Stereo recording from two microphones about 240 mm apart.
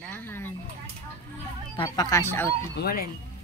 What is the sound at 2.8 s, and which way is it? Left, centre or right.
Speech, left.